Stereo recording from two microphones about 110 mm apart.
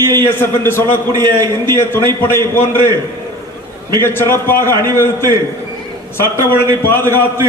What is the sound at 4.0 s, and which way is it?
Speech, 20° left (ahead or behind).